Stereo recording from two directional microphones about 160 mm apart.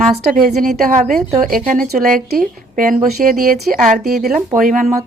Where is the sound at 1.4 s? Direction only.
55° right (ahead or behind).